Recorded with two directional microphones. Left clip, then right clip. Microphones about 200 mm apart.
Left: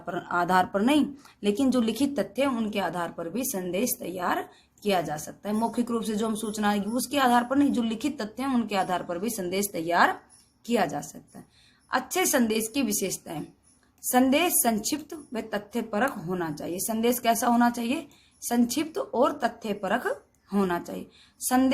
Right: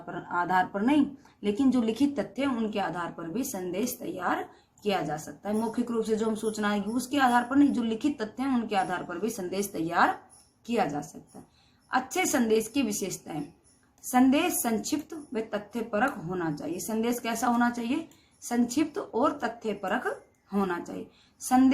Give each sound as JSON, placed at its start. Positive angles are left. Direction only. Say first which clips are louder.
{"t": 0.1, "sound": "speech", "louder": "left 3 dB", "side_deg": 50}